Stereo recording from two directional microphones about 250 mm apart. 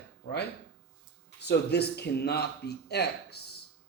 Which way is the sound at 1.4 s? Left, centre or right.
Left.